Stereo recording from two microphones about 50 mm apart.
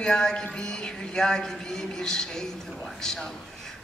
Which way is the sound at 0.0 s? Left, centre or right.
Centre.